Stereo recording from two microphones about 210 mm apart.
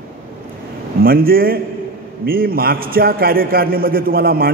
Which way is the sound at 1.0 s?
45° right (ahead or behind).